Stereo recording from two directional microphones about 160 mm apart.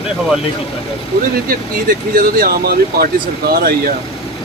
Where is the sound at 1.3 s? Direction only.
65° right (ahead or behind).